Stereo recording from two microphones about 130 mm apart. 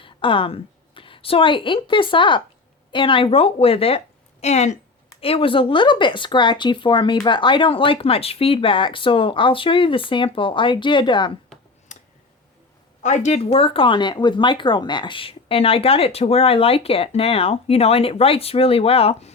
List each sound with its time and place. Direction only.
0.0 s a woman's voice: 40° left (ahead or behind); by 4.8 s 55° left (ahead or behind)
5.2 s speech: 45° left (ahead or behind)
11.9 s tick: 65° left (ahead or behind)
13.0 s speech: 65° left (ahead or behind); by 19.3 s 50° left (ahead or behind)